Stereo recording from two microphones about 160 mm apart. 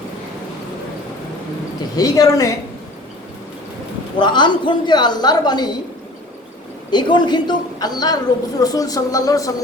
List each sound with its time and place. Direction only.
2.0 s a woman's voice: 20° left (ahead or behind)
4.2 s a woman's voice: 30° left (ahead or behind)
6.9 s a woman's voice: 30° left (ahead or behind)